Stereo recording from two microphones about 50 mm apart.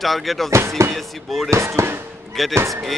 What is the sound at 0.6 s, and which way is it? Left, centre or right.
Music, right.